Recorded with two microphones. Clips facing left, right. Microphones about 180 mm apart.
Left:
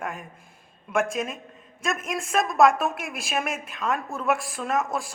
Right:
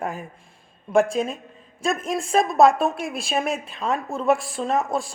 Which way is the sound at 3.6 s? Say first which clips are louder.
Right 2 dB; 30° right (ahead or behind).